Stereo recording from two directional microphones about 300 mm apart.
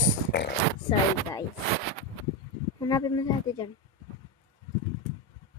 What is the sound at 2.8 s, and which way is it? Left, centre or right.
Speech, centre.